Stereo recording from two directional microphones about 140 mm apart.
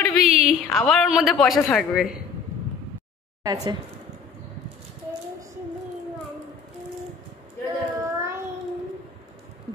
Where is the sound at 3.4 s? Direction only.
25° right (ahead or behind).